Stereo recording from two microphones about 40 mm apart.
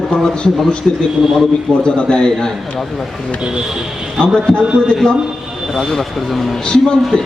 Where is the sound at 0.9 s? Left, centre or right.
Centre.